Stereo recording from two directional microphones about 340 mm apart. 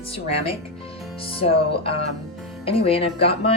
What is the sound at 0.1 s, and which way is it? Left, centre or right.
Speech, centre.